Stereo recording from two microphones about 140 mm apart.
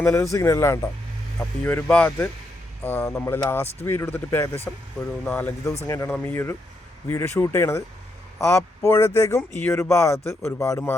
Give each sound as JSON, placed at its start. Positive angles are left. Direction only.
{"t": 0.0, "sound": "speech", "side_deg": 15}